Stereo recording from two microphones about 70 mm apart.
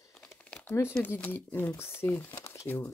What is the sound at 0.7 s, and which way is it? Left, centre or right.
Speech, left.